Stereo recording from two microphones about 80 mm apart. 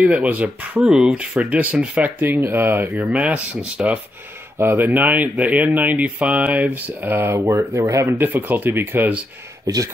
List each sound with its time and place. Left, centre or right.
0.0 s speech: centre
2.9 s speech: centre
4.6 s speech: right
8.2 s speech: right
9.7 s speech: right